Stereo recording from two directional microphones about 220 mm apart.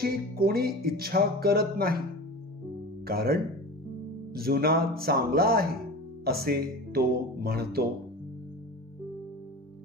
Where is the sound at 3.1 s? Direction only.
45° right (ahead or behind).